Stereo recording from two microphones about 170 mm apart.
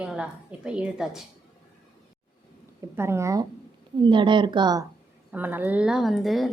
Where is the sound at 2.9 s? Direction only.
15° right (ahead or behind).